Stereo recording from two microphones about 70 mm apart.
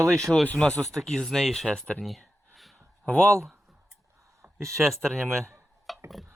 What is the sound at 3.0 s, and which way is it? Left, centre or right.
Speech, centre.